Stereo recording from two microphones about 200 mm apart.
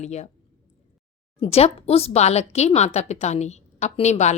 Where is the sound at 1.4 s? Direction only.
30° left (ahead or behind).